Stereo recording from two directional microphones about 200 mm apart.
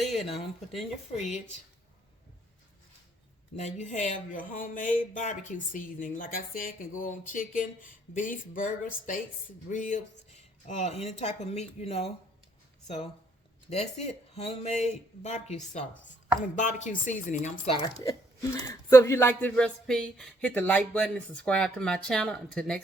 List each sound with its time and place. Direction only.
0.0 s a sound: centre (ahead or behind)
3.5 s speech: 35° left (ahead or behind)
13.7 s speech: 35° left (ahead or behind)
17.7 s speech: 20° left (ahead or behind); by 22.8 s 5° left (ahead or behind)